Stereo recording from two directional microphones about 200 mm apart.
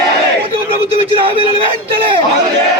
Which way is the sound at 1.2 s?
25° right (ahead or behind).